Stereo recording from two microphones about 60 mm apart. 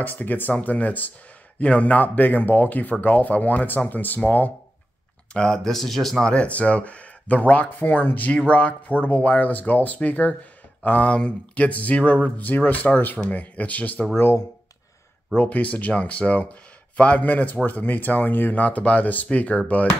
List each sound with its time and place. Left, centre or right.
0.0 s speech: left
5.3 s speech: centre
6.3 s speech: centre
15.3 s speech: left